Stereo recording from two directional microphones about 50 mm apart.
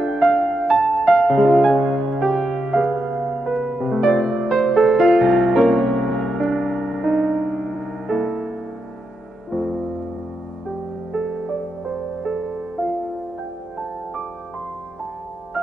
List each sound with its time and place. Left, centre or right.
0.0 s music: centre
2.6 s music: centre
5.9 s music: centre
7.1 s music: centre
7.3 s music: centre
9.5 s music: centre
12.2 s music: centre